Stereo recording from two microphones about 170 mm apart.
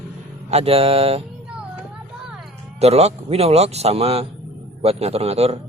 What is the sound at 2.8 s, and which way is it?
Speech, 40° right (ahead or behind).